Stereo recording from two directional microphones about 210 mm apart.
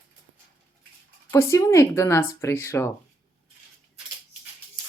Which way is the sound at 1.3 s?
15° left (ahead or behind).